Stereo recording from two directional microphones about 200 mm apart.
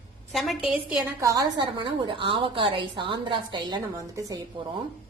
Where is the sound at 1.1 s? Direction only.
15° right (ahead or behind).